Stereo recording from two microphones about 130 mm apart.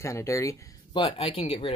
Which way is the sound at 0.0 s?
25° left (ahead or behind).